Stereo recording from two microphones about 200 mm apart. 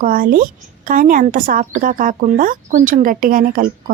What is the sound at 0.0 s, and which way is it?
A woman's voice, 45° right (ahead or behind).